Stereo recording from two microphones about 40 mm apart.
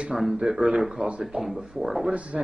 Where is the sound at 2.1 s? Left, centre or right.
Right.